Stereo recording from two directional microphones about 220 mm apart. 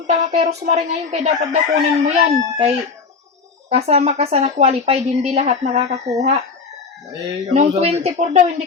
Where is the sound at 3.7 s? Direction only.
30° right (ahead or behind).